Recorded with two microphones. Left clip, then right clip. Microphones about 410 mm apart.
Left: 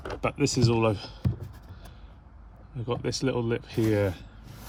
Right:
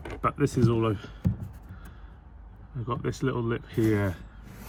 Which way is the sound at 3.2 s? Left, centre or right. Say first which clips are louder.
Left 3 dB; left.